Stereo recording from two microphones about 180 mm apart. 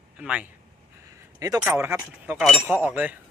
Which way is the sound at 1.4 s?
20° right (ahead or behind).